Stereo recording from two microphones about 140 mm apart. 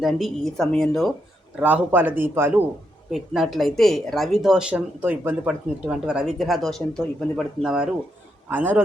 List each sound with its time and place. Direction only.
0.0 s speech: centre (ahead or behind)
1.5 s a man's voice: 10° right (ahead or behind)
3.1 s a man's voice: centre (ahead or behind)